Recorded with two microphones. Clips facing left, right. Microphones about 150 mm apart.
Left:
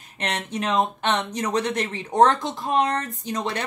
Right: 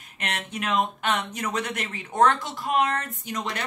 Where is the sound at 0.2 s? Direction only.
30° left (ahead or behind).